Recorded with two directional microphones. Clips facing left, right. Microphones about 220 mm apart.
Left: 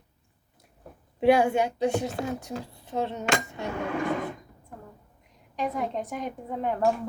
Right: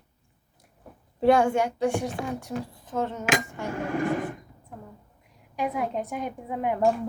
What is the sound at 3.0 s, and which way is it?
Cutlery, 20° left (ahead or behind).